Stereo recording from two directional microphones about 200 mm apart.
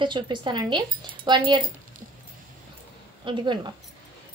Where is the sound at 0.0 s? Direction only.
25° right (ahead or behind).